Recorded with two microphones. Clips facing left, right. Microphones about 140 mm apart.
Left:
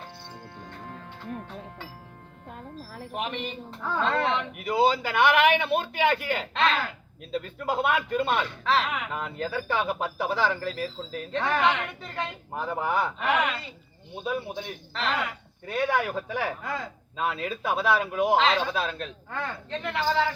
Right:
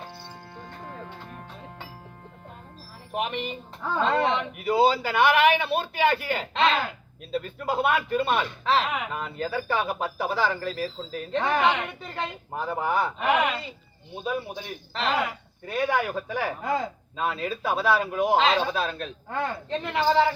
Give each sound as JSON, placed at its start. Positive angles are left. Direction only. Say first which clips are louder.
{"t": 3.2, "sound": "a man's voice", "louder": "right 3 dB", "side_deg": -5}
{"t": 14.6, "sound": "speech", "louder": "right 2 dB", "side_deg": -5}
{"t": 16.6, "sound": "speech", "louder": "right 6 dB", "side_deg": -25}
{"t": 17.2, "sound": "speech", "louder": "right 1 dB", "side_deg": 0}
{"t": 18.3, "sound": "speech", "louder": "right 3 dB", "side_deg": -20}
{"t": 18.7, "sound": "speech", "louder": "right 1 dB", "side_deg": 0}
{"t": 19.3, "sound": "a man's voice", "louder": "right 5 dB", "side_deg": -15}